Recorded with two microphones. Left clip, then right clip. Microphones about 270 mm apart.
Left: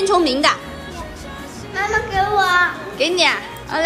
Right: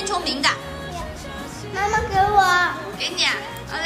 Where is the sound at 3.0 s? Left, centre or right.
Centre.